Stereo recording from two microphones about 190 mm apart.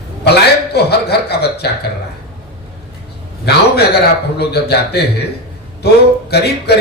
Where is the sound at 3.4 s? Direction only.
60° left (ahead or behind).